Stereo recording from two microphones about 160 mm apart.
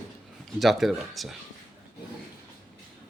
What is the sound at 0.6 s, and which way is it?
Speech, centre (ahead or behind).